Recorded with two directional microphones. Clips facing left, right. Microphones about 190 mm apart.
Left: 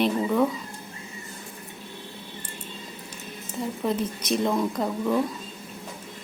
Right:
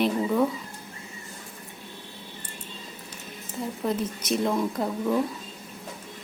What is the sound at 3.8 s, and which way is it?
Speech, centre (ahead or behind).